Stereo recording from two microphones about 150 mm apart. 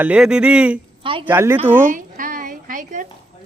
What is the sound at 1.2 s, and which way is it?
Speech, 15° right (ahead or behind).